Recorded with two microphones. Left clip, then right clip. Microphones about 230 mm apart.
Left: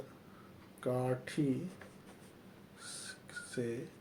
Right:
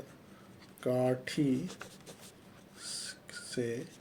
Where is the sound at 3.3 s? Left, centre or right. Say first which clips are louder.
Right 3 dB; right.